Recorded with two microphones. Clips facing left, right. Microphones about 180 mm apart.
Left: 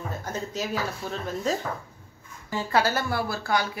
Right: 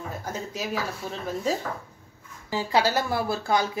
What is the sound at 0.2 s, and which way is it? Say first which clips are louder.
Speech: left 3 dB; 10° right (ahead or behind).